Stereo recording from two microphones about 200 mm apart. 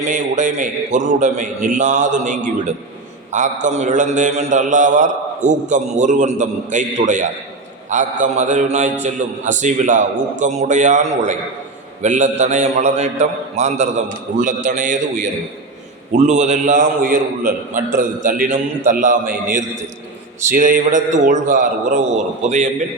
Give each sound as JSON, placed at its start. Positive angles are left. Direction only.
{"t": 0.0, "sound": "a man's voice", "side_deg": -40}
{"t": 12.0, "sound": "a man's voice", "side_deg": -40}